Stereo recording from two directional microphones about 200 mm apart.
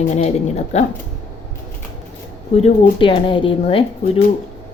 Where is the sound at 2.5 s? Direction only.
30° left (ahead or behind).